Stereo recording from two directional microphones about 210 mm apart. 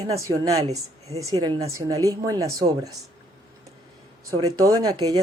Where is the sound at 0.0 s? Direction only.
15° right (ahead or behind).